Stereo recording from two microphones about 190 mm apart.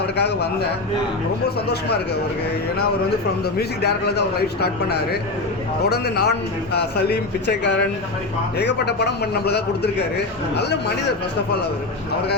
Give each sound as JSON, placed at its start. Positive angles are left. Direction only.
{"t": 0.2, "sound": "a man's voice", "side_deg": 60}
{"t": 1.5, "sound": "a man's voice", "side_deg": 60}
{"t": 3.4, "sound": "a man's voice", "side_deg": 60}